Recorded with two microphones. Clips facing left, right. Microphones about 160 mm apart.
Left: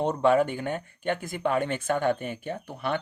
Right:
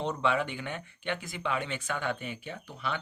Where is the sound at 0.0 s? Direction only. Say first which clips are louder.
Left 7 dB; 50° left (ahead or behind).